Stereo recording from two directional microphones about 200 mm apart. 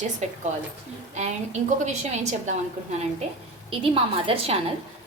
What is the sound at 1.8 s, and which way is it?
Speech, 35° right (ahead or behind).